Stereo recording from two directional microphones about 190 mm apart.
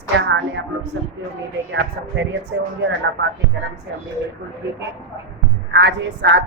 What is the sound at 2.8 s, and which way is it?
Speech, 70° right (ahead or behind).